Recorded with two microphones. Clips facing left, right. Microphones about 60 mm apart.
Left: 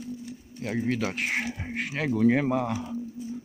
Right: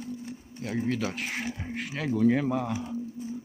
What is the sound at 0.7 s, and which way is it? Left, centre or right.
Speech, left.